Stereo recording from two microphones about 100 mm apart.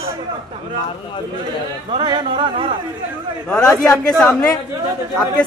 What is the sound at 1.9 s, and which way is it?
Speech, 50° right (ahead or behind).